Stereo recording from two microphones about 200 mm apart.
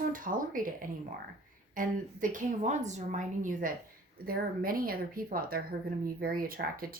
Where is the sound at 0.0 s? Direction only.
45° right (ahead or behind).